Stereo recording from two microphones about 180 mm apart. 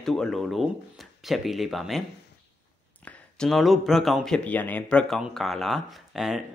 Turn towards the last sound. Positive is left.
turn(degrees=0)  # may be behind; listen again after turning